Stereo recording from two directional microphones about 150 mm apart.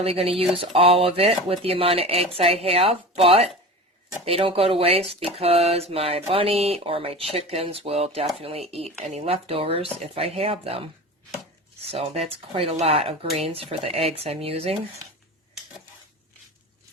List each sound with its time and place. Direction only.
0.0 s speech: 40° right (ahead or behind)
11.9 s speech: 40° right (ahead or behind)